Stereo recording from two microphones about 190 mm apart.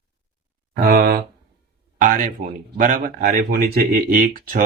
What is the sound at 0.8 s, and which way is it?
Speech, 50° right (ahead or behind).